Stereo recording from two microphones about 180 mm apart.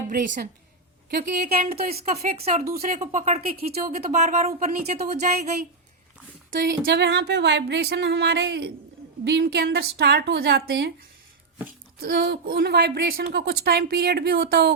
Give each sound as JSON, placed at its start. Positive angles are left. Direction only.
{"t": 0.1, "sound": "a woman's voice", "side_deg": -45}
{"t": 1.1, "sound": "a woman's voice", "side_deg": -60}
{"t": 1.5, "sound": "speech", "side_deg": -35}
{"t": 6.7, "sound": "a woman's voice", "side_deg": -70}
{"t": 11.9, "sound": "a woman's voice", "side_deg": -60}